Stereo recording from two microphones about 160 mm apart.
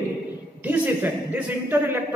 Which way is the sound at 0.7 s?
10° right (ahead or behind).